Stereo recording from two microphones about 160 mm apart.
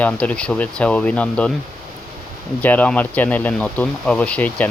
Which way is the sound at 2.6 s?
10° left (ahead or behind).